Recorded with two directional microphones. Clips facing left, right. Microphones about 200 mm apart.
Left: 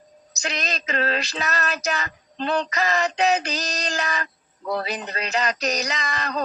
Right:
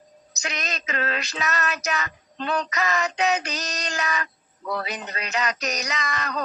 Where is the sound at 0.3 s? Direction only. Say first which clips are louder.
Left 3 dB; 30° left (ahead or behind).